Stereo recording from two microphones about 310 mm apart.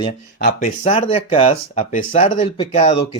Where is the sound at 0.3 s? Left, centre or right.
Left.